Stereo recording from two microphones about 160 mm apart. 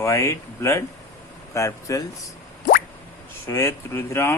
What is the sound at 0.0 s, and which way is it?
Speech, 20° left (ahead or behind).